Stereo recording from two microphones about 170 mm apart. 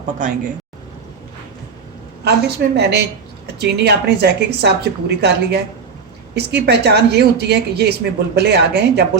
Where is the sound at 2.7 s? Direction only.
75° right (ahead or behind).